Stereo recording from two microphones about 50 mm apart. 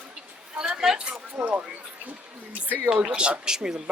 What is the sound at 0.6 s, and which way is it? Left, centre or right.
Speech, centre.